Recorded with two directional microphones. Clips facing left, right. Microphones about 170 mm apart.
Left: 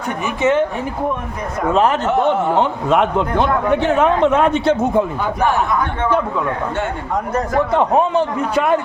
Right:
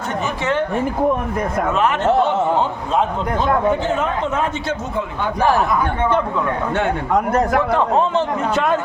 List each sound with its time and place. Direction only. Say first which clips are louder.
1.7 s speech: left 6 dB; 35° left (ahead or behind)
2.6 s a man's voice: left 3 dB; 75° left (ahead or behind); by 5.0 s 60° left (ahead or behind)
7.7 s a man's voice: left 2 dB; 15° left (ahead or behind)